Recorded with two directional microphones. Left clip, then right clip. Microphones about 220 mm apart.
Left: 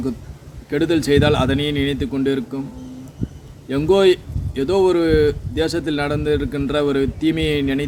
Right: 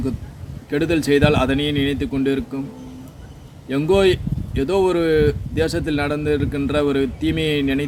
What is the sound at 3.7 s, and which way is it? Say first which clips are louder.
Speech: left 2 dB; 5° left (ahead or behind).